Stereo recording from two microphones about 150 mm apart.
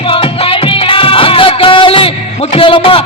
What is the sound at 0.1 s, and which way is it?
Music, 35° left (ahead or behind).